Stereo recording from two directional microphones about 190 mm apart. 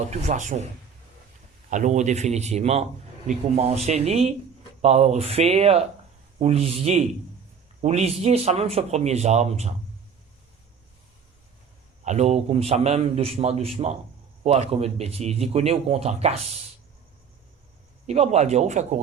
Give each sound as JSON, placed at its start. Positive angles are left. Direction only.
{"t": 0.1, "sound": "a man's voice", "side_deg": -40}
{"t": 1.7, "sound": "a man's voice", "side_deg": -40}
{"t": 12.0, "sound": "a man's voice", "side_deg": -35}
{"t": 18.0, "sound": "a man's voice", "side_deg": -35}